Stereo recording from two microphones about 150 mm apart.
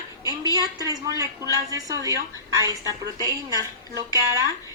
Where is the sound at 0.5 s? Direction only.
25° right (ahead or behind).